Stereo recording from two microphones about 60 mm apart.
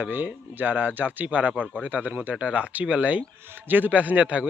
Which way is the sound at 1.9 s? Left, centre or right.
Right.